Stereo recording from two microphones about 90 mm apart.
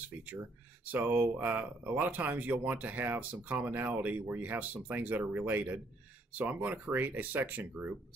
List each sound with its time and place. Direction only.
0.2 s speech: 20° right (ahead or behind)